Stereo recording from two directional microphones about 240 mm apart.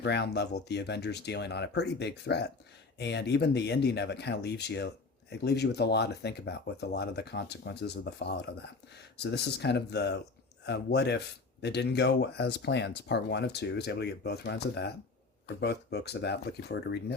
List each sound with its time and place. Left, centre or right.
0.0 s speech: left